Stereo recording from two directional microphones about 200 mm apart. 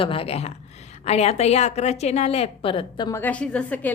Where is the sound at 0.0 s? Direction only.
30° left (ahead or behind).